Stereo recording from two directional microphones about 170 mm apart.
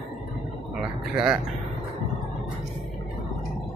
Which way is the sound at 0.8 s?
5° right (ahead or behind).